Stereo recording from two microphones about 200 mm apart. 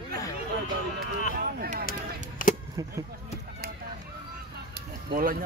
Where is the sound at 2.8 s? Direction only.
20° right (ahead or behind).